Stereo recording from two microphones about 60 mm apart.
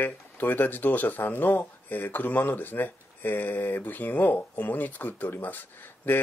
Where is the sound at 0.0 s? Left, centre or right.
Left.